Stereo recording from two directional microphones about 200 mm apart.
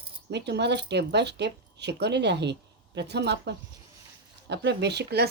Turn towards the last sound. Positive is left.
turn(degrees=-55)  # may be behind; listen again after turning